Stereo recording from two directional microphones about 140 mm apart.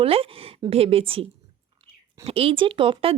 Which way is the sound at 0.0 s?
40° right (ahead or behind).